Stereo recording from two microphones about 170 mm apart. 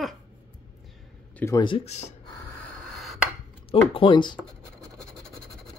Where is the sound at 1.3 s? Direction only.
15° left (ahead or behind).